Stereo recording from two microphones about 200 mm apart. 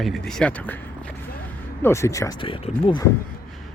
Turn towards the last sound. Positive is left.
turn(degrees=25)  # may be behind; listen again after turning